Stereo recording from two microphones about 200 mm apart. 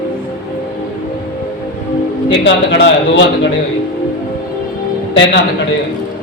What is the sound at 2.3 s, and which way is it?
Speech, 60° left (ahead or behind).